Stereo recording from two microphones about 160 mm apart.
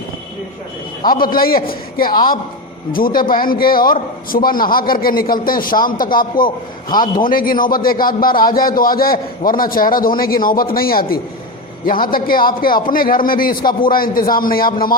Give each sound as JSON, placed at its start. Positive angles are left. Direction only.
{"t": 1.0, "sound": "speech", "side_deg": 65}
{"t": 6.9, "sound": "a man's voice", "side_deg": 25}
{"t": 7.3, "sound": "speech", "side_deg": 60}